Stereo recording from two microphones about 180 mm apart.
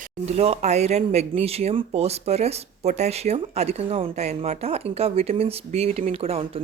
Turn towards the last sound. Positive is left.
turn(degrees=-35)  # may be behind; listen again after turning